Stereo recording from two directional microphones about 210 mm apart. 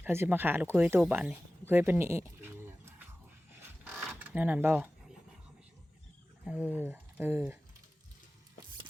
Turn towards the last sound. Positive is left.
turn(degrees=-10)  # may be behind; listen again after turning